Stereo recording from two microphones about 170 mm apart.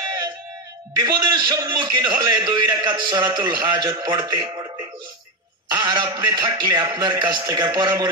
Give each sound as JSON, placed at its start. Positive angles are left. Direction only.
{"t": 0.9, "sound": "a man's voice", "side_deg": -20}
{"t": 5.7, "sound": "speech", "side_deg": -20}